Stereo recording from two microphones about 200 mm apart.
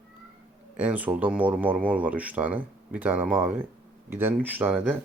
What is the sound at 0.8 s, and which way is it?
Speech, 10° right (ahead or behind).